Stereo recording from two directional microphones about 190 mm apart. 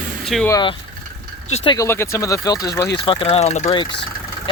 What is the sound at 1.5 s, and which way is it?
Speech, 35° left (ahead or behind).